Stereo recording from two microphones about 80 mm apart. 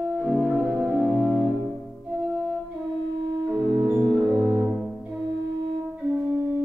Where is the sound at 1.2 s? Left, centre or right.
Left.